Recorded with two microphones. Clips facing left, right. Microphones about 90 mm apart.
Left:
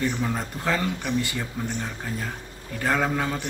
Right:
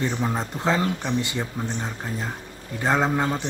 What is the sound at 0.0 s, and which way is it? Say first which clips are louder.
Speech: right 1 dB; 20° right (ahead or behind).